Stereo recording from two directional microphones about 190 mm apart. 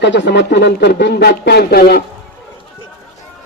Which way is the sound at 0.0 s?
65° left (ahead or behind).